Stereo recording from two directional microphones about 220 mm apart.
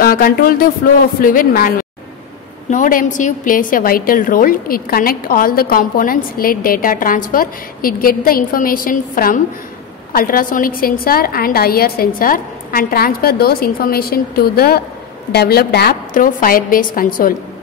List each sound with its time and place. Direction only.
0.0 s a woman's voice: 40° left (ahead or behind)